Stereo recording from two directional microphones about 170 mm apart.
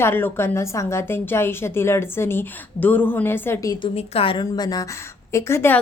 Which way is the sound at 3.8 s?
35° left (ahead or behind).